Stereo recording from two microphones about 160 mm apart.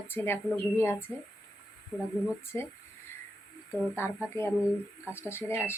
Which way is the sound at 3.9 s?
15° left (ahead or behind).